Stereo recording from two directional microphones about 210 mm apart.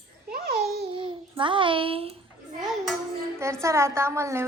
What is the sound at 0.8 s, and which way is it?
Child singing, 25° right (ahead or behind).